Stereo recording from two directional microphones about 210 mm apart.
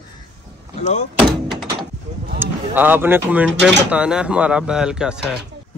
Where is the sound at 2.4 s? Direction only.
10° right (ahead or behind).